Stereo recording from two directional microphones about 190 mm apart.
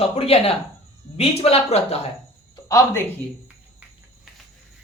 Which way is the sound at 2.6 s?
15° left (ahead or behind).